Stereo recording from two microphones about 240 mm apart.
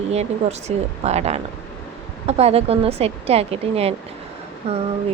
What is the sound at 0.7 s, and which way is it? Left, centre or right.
Speech, right.